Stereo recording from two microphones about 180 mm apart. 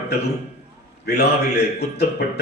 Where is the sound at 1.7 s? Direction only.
65° left (ahead or behind).